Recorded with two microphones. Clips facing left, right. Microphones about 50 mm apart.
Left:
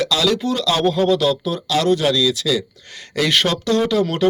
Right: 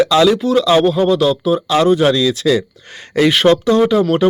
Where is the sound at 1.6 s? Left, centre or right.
Right.